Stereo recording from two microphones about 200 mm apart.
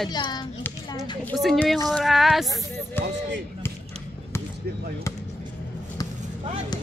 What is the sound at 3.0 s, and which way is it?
Speech, 10° left (ahead or behind).